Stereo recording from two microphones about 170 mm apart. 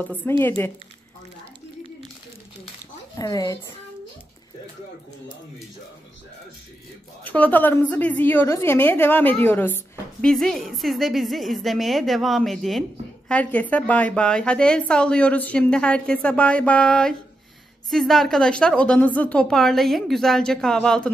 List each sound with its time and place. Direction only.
0.4 s a woman's voice: 15° left (ahead or behind)
3.2 s speech: 20° left (ahead or behind)
7.2 s a woman's voice: 10° left (ahead or behind)